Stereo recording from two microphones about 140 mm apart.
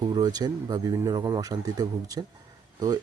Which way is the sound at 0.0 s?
30° right (ahead or behind).